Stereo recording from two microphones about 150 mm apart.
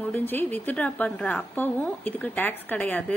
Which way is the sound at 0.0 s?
10° left (ahead or behind).